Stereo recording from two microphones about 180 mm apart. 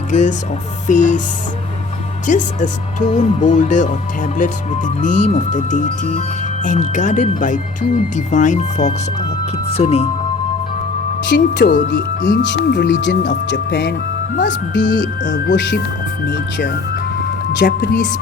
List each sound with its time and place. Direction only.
0.1 s speech: 45° left (ahead or behind)
2.2 s speech: 45° left (ahead or behind)
11.3 s speech: 75° left (ahead or behind); by 18.1 s 50° left (ahead or behind)